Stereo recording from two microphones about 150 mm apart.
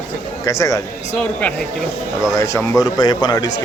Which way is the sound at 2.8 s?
25° left (ahead or behind).